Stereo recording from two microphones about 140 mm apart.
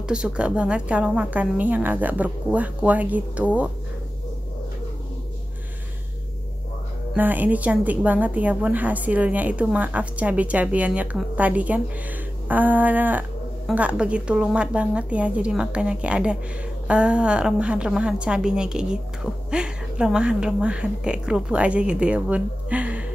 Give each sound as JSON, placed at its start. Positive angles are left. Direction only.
{"t": 0.1, "sound": "a woman's voice", "side_deg": -5}
{"t": 7.2, "sound": "a woman's voice", "side_deg": -10}